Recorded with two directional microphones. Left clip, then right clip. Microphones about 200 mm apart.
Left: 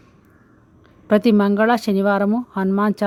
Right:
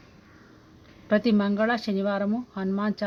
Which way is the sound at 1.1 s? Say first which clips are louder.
Left 8 dB; 35° left (ahead or behind).